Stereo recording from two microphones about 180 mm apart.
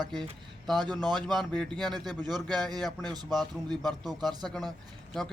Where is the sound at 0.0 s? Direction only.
Centre (ahead or behind).